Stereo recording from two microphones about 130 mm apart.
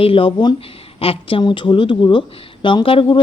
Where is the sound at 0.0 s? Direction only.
45° left (ahead or behind).